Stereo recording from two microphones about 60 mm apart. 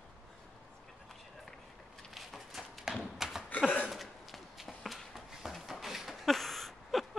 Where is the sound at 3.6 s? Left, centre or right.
Centre.